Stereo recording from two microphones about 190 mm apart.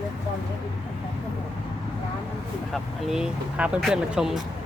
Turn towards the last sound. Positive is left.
turn(degrees=-5)  # may be behind; listen again after turning